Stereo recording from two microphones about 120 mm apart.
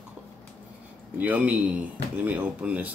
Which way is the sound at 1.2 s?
10° right (ahead or behind).